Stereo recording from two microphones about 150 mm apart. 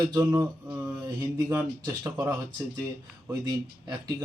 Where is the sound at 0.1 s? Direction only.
20° right (ahead or behind).